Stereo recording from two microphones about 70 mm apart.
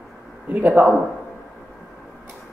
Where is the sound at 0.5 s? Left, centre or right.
Right.